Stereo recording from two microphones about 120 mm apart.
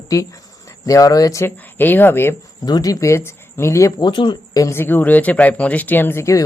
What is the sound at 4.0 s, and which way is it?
Speech, 40° left (ahead or behind).